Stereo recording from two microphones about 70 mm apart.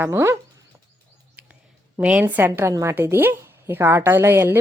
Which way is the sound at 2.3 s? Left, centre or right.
Right.